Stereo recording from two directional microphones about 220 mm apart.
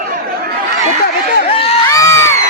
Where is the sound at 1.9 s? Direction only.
15° left (ahead or behind).